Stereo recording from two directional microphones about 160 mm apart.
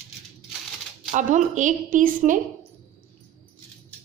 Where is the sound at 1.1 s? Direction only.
50° right (ahead or behind).